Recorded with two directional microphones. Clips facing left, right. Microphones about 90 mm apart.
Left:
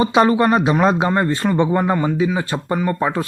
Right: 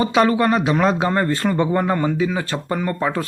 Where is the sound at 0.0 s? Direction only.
25° left (ahead or behind).